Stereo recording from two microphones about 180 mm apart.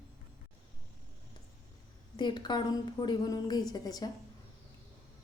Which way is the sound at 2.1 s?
25° left (ahead or behind).